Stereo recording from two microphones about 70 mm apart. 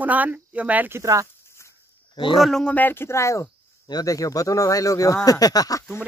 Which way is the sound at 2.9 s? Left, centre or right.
Left.